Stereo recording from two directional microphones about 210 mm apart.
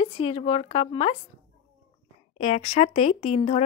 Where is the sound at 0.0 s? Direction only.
25° left (ahead or behind).